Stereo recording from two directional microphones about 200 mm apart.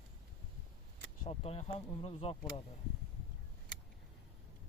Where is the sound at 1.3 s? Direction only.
30° left (ahead or behind).